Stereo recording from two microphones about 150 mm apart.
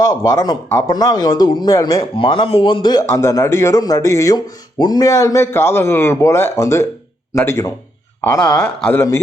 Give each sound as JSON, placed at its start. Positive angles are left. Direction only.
{"t": 0.0, "sound": "speech", "side_deg": 20}
{"t": 8.4, "sound": "speech", "side_deg": 5}